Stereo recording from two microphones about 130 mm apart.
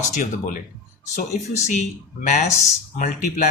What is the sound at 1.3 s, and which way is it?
Speech, 75° left (ahead or behind).